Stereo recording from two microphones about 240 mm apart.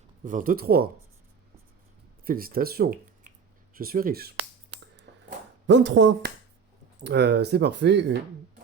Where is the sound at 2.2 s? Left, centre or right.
Right.